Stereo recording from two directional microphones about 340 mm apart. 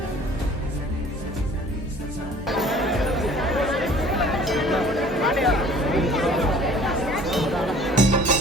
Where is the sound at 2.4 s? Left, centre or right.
Centre.